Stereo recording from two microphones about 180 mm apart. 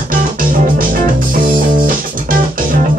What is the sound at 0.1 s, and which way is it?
Music, 50° right (ahead or behind).